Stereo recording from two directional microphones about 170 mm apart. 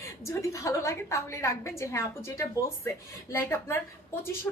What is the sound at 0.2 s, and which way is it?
A woman's voice, 20° left (ahead or behind).